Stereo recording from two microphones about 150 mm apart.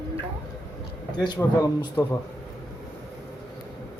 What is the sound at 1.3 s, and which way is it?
Speech, 25° left (ahead or behind).